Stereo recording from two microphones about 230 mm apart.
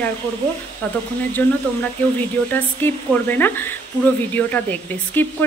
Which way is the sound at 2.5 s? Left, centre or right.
Centre.